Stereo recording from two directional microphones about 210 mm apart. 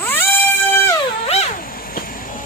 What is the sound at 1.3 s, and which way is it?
Cat, 35° left (ahead or behind).